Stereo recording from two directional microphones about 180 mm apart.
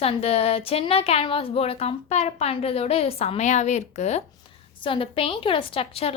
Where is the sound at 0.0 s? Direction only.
35° left (ahead or behind).